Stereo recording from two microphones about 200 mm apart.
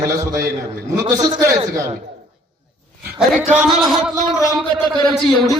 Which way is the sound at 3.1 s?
Centre (ahead or behind).